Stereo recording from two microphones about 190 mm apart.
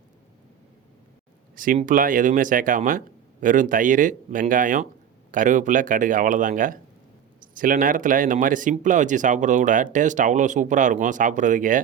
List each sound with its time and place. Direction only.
1.5 s speech: 45° right (ahead or behind)